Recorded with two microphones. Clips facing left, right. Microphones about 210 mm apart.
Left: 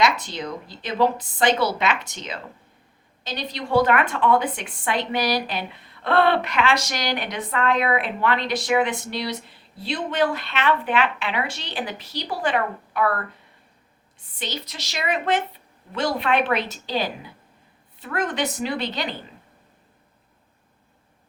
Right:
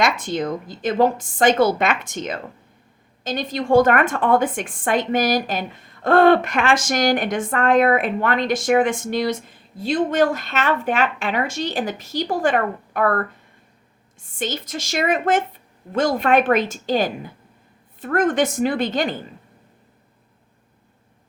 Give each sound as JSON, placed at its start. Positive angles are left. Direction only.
{"t": 0.0, "sound": "a woman's voice", "side_deg": -50}